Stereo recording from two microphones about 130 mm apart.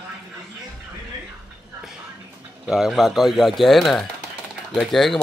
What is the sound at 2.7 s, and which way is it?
Speech, 5° right (ahead or behind).